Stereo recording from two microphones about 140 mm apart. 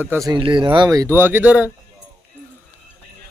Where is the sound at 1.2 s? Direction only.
15° right (ahead or behind).